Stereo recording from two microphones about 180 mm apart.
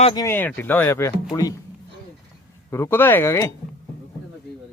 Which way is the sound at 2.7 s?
10° left (ahead or behind).